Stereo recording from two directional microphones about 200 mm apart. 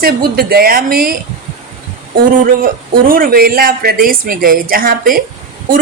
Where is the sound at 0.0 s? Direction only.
50° right (ahead or behind).